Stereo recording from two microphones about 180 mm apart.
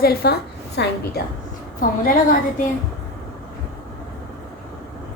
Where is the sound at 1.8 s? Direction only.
50° left (ahead or behind).